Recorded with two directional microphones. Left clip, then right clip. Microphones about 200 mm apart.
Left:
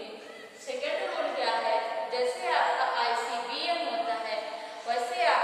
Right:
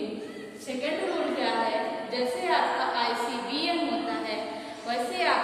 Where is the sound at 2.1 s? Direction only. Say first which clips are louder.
Right 3 dB; 10° left (ahead or behind); by 5.3 s 10° right (ahead or behind).